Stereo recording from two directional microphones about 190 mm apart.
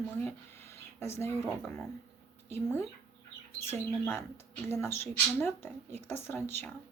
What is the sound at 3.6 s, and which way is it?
Speech, 15° left (ahead or behind).